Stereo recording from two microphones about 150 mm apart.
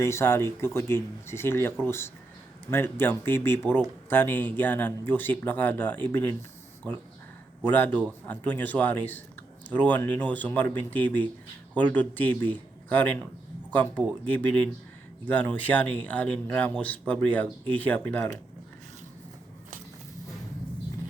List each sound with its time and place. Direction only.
0.0 s speech: 15° left (ahead or behind)
7.6 s speech: 10° left (ahead or behind)